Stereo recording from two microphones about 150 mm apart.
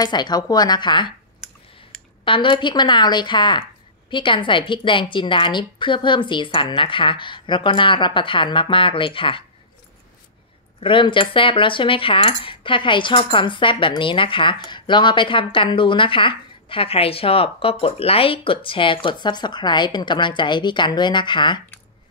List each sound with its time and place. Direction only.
0.0 s a woman's voice: 30° left (ahead or behind)
2.2 s speech: 35° left (ahead or behind)
10.8 s speech: 35° left (ahead or behind)